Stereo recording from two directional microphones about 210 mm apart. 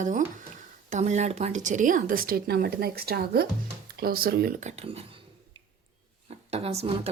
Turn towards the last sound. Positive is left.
turn(degrees=-30)  # may be behind; listen again after turning